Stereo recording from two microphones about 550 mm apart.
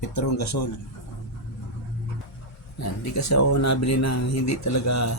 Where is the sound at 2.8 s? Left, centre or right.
Left.